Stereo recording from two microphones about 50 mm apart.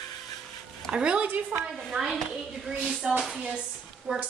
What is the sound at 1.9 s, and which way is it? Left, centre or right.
Speech, centre.